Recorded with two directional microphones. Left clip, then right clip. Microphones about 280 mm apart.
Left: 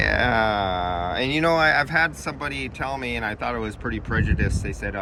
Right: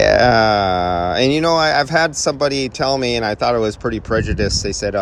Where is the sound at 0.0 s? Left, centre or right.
Centre.